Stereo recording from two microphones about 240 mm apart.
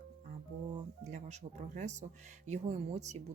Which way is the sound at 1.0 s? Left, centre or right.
Right.